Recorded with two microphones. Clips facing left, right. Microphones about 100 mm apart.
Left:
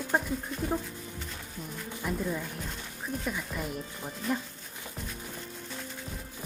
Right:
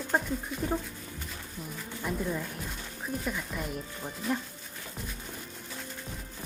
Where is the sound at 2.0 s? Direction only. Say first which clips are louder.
Even; centre (ahead or behind).